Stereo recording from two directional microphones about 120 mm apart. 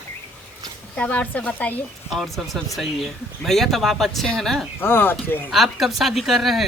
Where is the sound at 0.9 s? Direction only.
10° left (ahead or behind).